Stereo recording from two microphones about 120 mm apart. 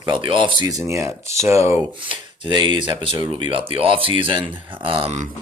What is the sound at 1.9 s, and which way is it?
Speech, 45° right (ahead or behind).